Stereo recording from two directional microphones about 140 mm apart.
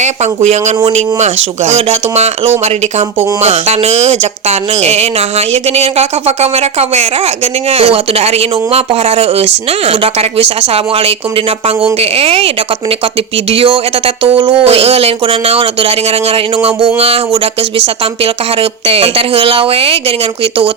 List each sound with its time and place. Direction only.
0.4 s speech: 55° right (ahead or behind)
13.5 s speech: 40° right (ahead or behind)